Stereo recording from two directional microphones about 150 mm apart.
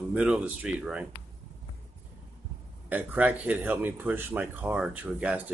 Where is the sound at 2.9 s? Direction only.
10° right (ahead or behind).